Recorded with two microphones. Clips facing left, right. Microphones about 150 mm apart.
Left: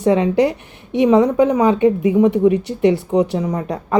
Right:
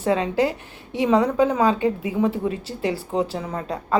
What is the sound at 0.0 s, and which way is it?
Speech, 20° left (ahead or behind).